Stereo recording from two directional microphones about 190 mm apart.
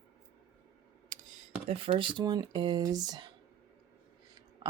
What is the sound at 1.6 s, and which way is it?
Speech, 30° right (ahead or behind).